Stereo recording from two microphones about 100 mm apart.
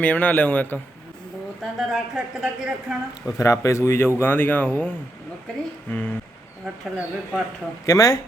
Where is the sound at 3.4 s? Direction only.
30° left (ahead or behind).